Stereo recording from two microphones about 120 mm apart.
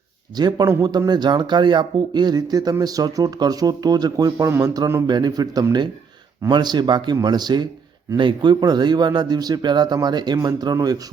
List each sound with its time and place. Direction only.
0.3 s speech: 35° right (ahead or behind)